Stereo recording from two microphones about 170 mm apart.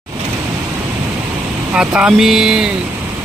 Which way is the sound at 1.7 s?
5° right (ahead or behind).